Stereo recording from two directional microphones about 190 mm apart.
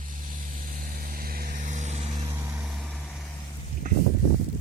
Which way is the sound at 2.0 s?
25° right (ahead or behind).